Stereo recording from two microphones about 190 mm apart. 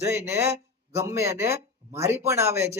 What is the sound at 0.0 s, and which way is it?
Speech, 15° right (ahead or behind).